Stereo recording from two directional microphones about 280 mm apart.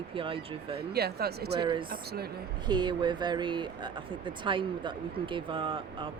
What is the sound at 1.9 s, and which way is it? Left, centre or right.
Speech, right.